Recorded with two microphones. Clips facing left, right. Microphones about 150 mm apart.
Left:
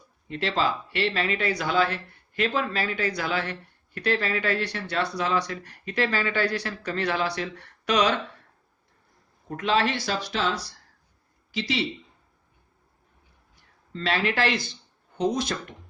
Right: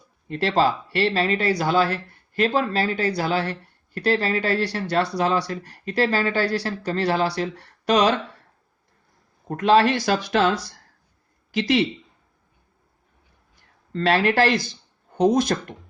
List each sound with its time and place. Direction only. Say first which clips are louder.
0.3 s speech: right 5 dB; 40° right (ahead or behind)
9.5 s speech: right 7 dB; 45° right (ahead or behind)
13.9 s speech: right 7 dB; 50° right (ahead or behind)